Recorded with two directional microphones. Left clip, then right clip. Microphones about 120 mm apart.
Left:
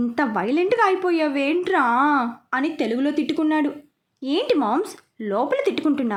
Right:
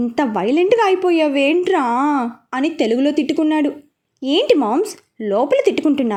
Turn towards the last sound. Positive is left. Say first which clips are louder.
# right 5 dB
turn(degrees=-20)  # may be behind; listen again after turning